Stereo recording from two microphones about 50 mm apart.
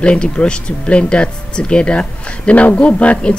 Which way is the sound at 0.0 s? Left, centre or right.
Left.